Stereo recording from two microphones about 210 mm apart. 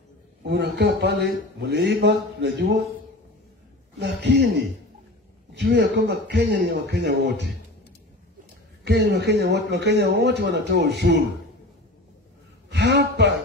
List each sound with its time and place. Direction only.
0.4 s speech: 55° right (ahead or behind)
4.0 s speech: 55° right (ahead or behind)
5.5 s a man's voice: 50° right (ahead or behind)
8.8 s a man's voice: 55° right (ahead or behind)
12.6 s a sound: 55° right (ahead or behind)